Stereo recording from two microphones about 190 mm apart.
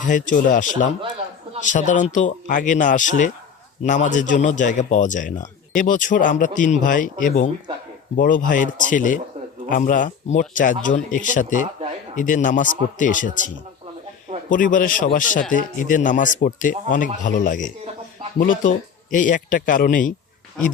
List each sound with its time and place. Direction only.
0.0 s speech: 45° left (ahead or behind)
14.5 s speech: 45° left (ahead or behind)